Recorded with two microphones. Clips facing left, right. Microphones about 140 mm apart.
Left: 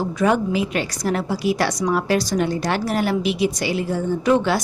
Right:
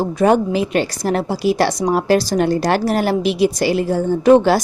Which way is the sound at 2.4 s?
45° right (ahead or behind).